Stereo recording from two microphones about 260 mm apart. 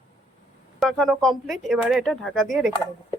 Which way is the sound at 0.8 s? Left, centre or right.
Centre.